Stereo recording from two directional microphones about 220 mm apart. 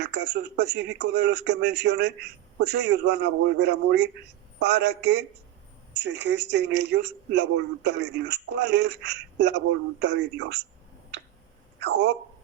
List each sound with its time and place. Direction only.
0.0 s speech: 50° right (ahead or behind)
11.8 s speech: 50° right (ahead or behind)